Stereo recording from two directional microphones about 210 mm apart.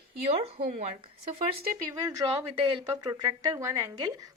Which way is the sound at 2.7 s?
20° right (ahead or behind).